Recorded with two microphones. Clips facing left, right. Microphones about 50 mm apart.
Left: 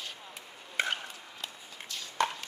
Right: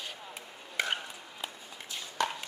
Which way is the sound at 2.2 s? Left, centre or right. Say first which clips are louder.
Left 2 dB; left.